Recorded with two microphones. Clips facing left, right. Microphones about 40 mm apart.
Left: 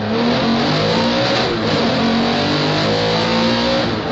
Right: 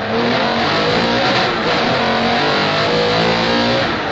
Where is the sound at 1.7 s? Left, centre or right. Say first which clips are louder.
Right 1 dB; centre.